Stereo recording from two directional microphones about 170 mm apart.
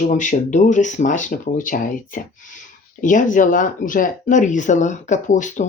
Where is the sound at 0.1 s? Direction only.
50° left (ahead or behind).